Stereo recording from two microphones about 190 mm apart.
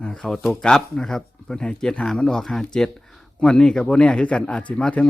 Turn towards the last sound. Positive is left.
turn(degrees=5)  # may be behind; listen again after turning